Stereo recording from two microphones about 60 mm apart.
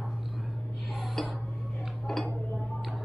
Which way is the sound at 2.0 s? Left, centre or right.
Centre.